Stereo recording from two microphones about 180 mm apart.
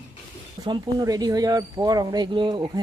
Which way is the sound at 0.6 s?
20° right (ahead or behind).